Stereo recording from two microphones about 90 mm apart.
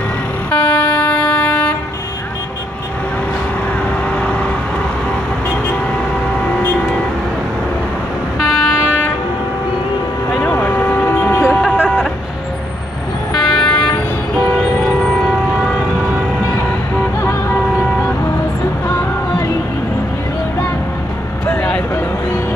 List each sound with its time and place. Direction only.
0.5 s vehicle: 15° left (ahead or behind)
4.1 s vehicle: 10° left (ahead or behind)
8.4 s vehicle: centre (ahead or behind)
10.4 s vehicle: 20° left (ahead or behind)
11.6 s chicken: 10° left (ahead or behind)
13.3 s vehicle: 5° left (ahead or behind)
21.5 s vehicle: 10° left (ahead or behind)